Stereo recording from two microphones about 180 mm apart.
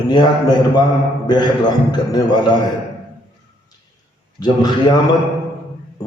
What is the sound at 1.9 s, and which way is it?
Speech, 25° left (ahead or behind).